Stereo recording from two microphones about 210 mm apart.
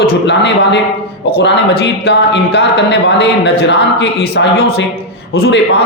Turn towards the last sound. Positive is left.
turn(degrees=50)  # may be behind; listen again after turning